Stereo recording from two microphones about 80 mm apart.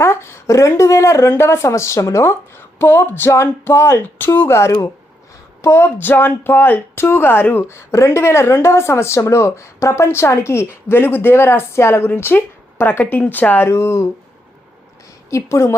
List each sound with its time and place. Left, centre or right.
0.0 s a woman's voice: left
13.7 s a woman's voice: left
15.3 s a woman's voice: left